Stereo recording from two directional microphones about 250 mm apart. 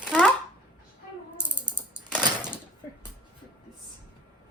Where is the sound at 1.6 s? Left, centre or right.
Centre.